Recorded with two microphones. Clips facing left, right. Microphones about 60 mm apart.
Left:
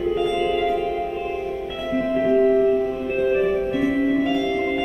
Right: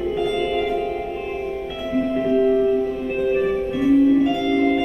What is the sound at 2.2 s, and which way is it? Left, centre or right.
Music, left.